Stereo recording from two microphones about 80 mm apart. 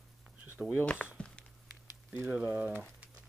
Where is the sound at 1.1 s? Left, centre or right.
Centre.